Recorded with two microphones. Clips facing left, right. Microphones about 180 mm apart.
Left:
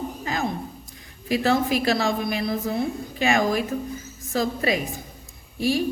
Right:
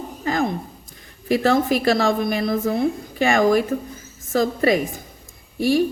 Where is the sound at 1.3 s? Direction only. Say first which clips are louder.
Right 3 dB; 50° right (ahead or behind).